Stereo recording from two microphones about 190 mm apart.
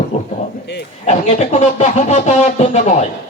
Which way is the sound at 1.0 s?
35° left (ahead or behind).